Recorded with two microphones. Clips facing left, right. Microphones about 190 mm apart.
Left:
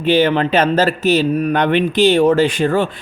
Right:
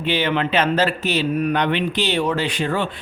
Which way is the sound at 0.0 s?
45° left (ahead or behind).